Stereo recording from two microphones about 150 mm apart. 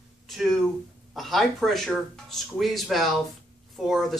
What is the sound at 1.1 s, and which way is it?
Speech, centre (ahead or behind).